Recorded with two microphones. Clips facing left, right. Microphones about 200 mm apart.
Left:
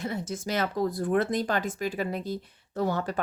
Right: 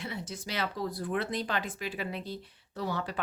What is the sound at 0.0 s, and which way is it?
Speech, 45° left (ahead or behind).